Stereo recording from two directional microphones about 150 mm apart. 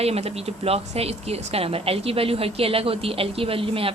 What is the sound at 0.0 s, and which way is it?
Speech, 45° right (ahead or behind).